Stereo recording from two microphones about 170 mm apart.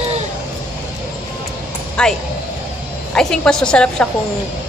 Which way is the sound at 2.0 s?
5° left (ahead or behind).